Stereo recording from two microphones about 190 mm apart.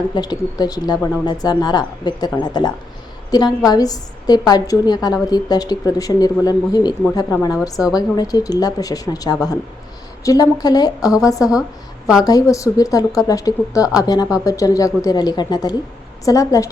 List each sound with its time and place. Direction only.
0.1 s a woman's voice: 20° left (ahead or behind)